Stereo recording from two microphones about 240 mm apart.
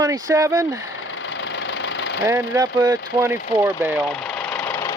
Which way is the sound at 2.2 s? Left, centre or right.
Centre.